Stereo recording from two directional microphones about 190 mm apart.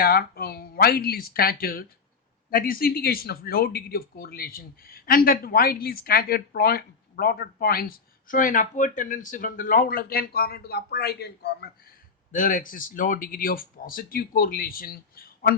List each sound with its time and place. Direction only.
0.0 s speech: 55° left (ahead or behind)
12.3 s speech: 45° left (ahead or behind)